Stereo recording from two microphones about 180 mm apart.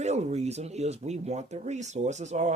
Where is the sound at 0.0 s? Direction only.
40° right (ahead or behind).